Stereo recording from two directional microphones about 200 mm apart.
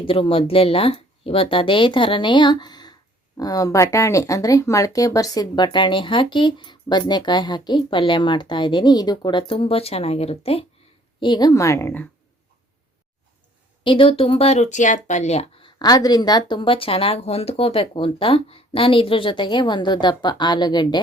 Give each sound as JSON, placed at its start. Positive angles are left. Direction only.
{"t": 0.0, "sound": "a woman's voice", "side_deg": 25}
{"t": 13.8, "sound": "speech", "side_deg": 25}